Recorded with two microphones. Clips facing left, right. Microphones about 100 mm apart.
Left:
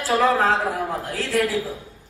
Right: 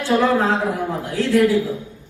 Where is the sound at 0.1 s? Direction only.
35° left (ahead or behind).